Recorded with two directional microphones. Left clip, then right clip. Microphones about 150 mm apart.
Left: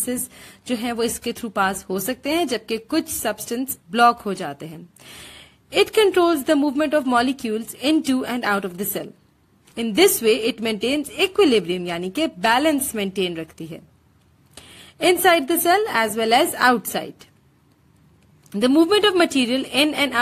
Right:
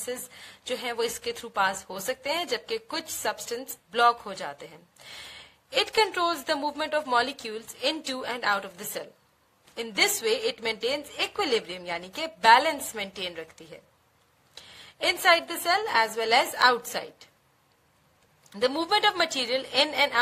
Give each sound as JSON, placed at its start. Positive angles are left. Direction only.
{"t": 0.0, "sound": "a woman's voice", "side_deg": 45}
{"t": 18.5, "sound": "a woman's voice", "side_deg": 40}